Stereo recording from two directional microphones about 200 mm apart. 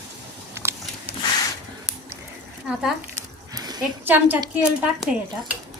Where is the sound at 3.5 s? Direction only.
20° right (ahead or behind).